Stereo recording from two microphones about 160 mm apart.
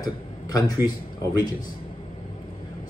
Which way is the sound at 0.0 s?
20° left (ahead or behind).